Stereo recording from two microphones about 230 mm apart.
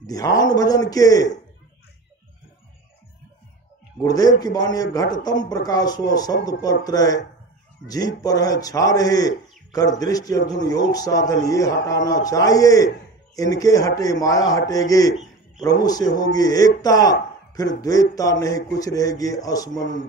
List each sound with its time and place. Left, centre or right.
0.0 s a man's voice: centre
4.0 s a man's voice: centre